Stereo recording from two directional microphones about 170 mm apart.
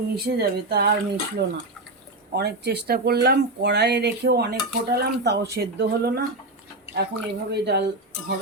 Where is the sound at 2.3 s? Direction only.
75° right (ahead or behind).